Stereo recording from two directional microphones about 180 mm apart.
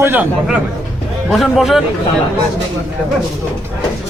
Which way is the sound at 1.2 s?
Centre (ahead or behind).